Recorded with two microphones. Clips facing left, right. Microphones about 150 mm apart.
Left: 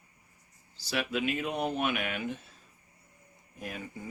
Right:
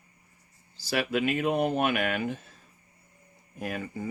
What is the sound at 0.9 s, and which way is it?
Speech, 50° right (ahead or behind).